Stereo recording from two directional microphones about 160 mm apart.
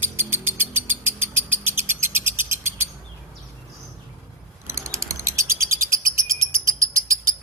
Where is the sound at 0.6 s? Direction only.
15° right (ahead or behind).